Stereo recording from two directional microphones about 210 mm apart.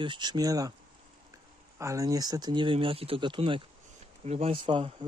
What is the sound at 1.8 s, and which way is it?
Speech, 15° right (ahead or behind).